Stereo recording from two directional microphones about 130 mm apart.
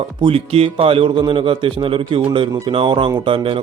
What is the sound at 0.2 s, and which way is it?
A man's voice, 45° right (ahead or behind).